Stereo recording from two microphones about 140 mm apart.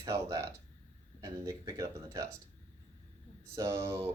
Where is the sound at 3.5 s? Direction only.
20° right (ahead or behind).